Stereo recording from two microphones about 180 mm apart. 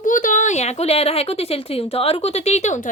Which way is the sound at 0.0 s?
45° left (ahead or behind).